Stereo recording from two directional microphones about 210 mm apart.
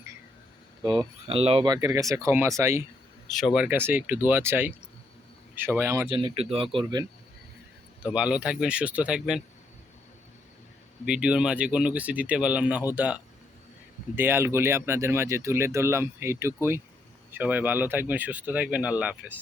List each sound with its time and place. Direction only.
0.8 s speech: 20° right (ahead or behind)
3.2 s speech: centre (ahead or behind); by 7.0 s 25° right (ahead or behind)
8.0 s speech: 5° right (ahead or behind)
11.0 s speech: 5° right (ahead or behind)
14.2 s speech: 10° right (ahead or behind)